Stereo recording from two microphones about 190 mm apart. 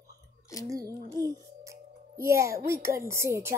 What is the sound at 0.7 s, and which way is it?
Speech, 15° right (ahead or behind).